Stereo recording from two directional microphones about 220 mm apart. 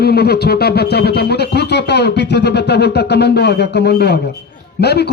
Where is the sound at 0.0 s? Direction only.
45° left (ahead or behind).